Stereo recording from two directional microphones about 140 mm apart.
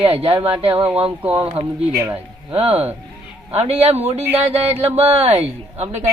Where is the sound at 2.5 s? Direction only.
45° right (ahead or behind).